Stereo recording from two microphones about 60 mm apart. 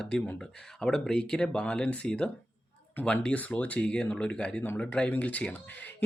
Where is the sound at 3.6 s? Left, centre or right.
Left.